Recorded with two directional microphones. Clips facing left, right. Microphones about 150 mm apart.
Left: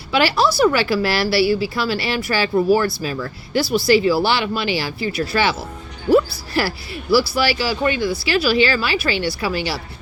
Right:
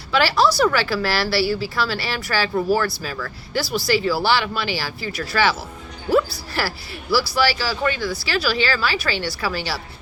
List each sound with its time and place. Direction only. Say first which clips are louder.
0.1 s speech: left 1 dB; 15° left (ahead or behind)